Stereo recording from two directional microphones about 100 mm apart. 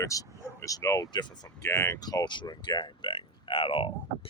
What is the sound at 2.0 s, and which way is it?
Speech, 45° left (ahead or behind).